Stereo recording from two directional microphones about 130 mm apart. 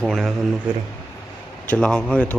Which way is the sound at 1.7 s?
10° left (ahead or behind).